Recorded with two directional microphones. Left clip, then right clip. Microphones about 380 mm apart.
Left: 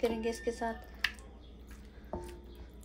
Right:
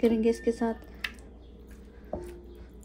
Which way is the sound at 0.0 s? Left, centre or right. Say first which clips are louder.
Right 8 dB; centre.